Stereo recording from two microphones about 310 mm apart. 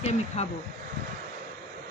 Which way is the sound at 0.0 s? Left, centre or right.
Centre.